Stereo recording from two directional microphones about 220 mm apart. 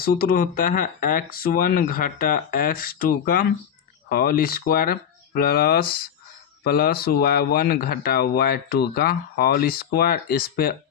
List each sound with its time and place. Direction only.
0.0 s speech: 40° left (ahead or behind)